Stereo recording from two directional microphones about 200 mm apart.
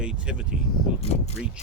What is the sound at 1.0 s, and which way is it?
Speech, 30° left (ahead or behind).